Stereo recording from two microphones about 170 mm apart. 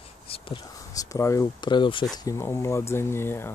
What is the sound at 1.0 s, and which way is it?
Speech, 20° left (ahead or behind).